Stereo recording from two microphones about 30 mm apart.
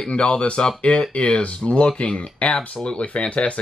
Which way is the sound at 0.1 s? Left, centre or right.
Left.